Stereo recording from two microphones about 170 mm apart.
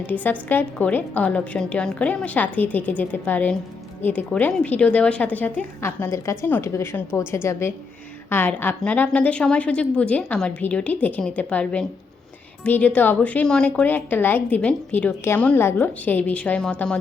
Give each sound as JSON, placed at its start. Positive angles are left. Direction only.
{"t": 0.0, "sound": "a woman's voice", "side_deg": 10}